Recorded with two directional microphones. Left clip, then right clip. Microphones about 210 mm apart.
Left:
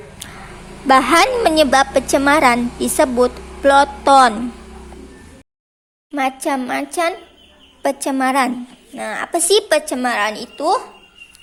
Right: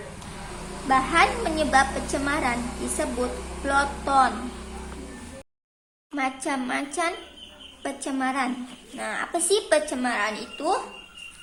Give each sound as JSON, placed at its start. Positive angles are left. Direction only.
{"t": 0.9, "sound": "a woman's voice", "side_deg": 50}
{"t": 6.1, "sound": "a woman's voice", "side_deg": 35}